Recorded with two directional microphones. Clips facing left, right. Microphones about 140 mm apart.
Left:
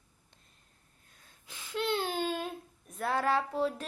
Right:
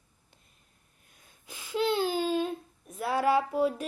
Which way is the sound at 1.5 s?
Centre (ahead or behind).